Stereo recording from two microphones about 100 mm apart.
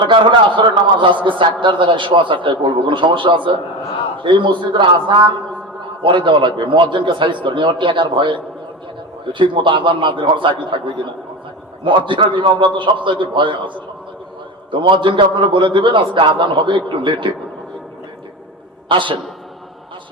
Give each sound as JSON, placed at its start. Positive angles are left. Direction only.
{"t": 0.1, "sound": "a man's voice", "side_deg": -55}
{"t": 9.4, "sound": "a man's voice", "side_deg": -55}
{"t": 14.7, "sound": "a man's voice", "side_deg": -55}
{"t": 18.9, "sound": "a man's voice", "side_deg": -55}